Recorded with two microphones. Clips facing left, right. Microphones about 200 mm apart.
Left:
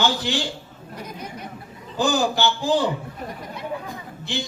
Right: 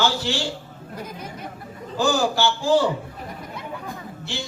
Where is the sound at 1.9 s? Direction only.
20° left (ahead or behind).